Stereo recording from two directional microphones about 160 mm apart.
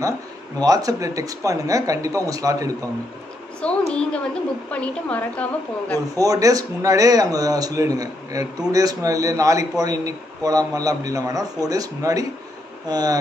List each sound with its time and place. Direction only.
0.6 s speech: 20° right (ahead or behind)
3.9 s a woman's voice: 5° left (ahead or behind)
6.1 s speech: 20° right (ahead or behind)